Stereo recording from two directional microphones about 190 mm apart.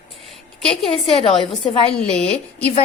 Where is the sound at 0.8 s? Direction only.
30° left (ahead or behind).